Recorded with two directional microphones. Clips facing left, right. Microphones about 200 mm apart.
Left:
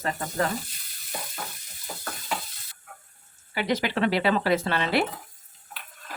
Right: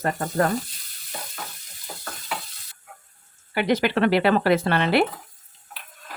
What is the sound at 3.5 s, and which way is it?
Speech, 55° right (ahead or behind).